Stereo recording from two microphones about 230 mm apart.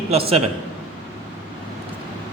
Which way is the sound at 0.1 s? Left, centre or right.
Right.